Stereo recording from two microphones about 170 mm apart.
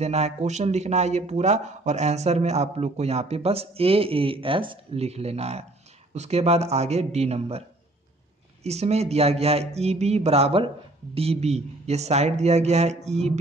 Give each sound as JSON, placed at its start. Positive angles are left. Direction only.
{"t": 0.0, "sound": "speech", "side_deg": -40}
{"t": 8.6, "sound": "speech", "side_deg": -40}